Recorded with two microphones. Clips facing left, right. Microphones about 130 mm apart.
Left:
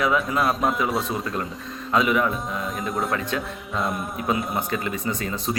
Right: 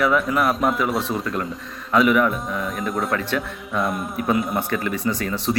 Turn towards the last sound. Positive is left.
turn(degrees=25)  # may be behind; listen again after turning